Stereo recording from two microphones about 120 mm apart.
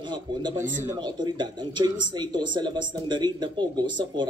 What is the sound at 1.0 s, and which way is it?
Speech, 40° right (ahead or behind).